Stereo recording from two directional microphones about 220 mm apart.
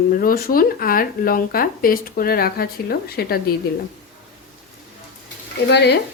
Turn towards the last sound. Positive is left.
turn(degrees=50)  # may be behind; listen again after turning